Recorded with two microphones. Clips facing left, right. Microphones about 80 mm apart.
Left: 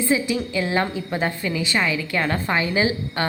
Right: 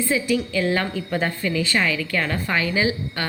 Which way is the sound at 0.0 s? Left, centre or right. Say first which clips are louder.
Even; left.